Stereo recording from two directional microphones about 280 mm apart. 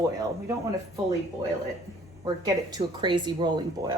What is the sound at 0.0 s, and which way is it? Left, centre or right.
Speech, centre.